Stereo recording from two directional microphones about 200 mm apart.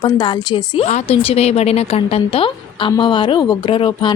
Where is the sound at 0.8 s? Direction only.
35° left (ahead or behind).